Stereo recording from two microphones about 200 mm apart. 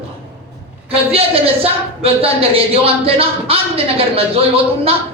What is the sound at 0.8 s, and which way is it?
A woman's voice, 30° right (ahead or behind).